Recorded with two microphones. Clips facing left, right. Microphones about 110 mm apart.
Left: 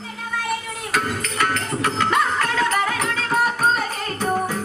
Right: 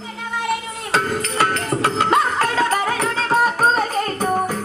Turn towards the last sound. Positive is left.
turn(degrees=-35)  # may be behind; listen again after turning